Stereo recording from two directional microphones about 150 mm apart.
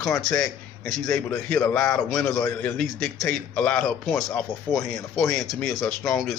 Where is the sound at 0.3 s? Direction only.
5° left (ahead or behind).